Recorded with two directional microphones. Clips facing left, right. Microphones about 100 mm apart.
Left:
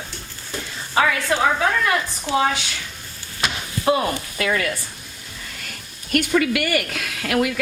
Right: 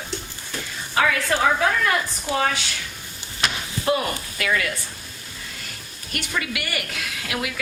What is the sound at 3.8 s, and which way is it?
Speech, 25° left (ahead or behind).